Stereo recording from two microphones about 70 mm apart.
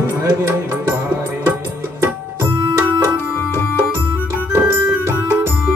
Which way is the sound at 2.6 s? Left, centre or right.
Right.